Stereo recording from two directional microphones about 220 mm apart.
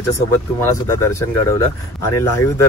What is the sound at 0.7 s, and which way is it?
Speech, 15° left (ahead or behind).